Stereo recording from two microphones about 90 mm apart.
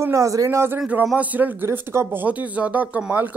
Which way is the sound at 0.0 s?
35° right (ahead or behind).